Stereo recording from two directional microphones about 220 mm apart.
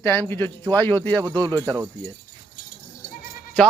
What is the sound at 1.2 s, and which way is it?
Speech, 15° right (ahead or behind).